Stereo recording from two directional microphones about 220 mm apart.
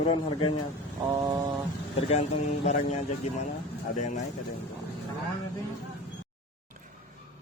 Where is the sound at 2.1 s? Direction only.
30° left (ahead or behind).